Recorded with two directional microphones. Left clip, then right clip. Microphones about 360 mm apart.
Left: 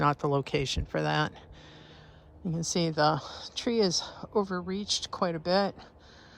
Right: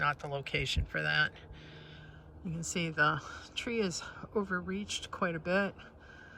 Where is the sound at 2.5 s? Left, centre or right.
Centre.